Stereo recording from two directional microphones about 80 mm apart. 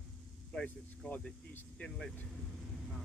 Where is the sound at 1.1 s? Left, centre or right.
Centre.